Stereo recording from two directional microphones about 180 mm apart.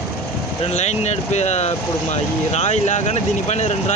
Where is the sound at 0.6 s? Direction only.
40° left (ahead or behind).